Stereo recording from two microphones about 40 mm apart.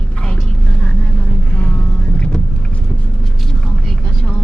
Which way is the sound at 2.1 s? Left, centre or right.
Left.